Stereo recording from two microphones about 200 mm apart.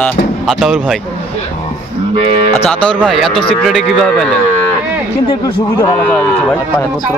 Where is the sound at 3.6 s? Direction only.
Centre (ahead or behind).